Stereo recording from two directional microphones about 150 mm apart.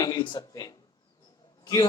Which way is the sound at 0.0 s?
30° left (ahead or behind).